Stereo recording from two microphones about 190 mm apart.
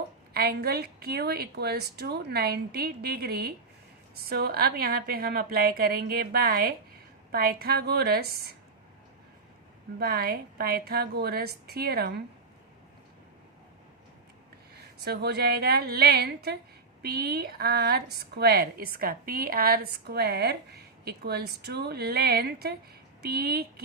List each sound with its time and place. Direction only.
0.3 s a woman's voice: 55° right (ahead or behind)
10.0 s a woman's voice: 55° right (ahead or behind)
15.0 s a woman's voice: 60° right (ahead or behind)